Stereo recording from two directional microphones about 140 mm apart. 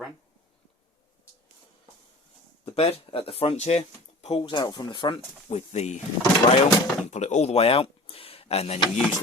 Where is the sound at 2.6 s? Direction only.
45° left (ahead or behind).